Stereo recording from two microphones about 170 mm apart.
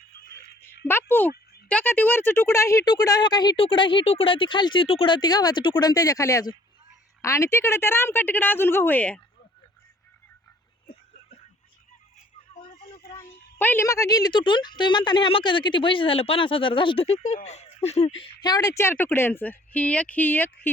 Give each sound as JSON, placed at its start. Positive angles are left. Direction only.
{"t": 0.9, "sound": "a woman's voice", "side_deg": 15}
{"t": 13.1, "sound": "a woman's voice", "side_deg": 10}